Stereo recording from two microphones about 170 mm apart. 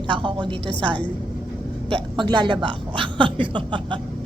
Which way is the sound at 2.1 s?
30° right (ahead or behind).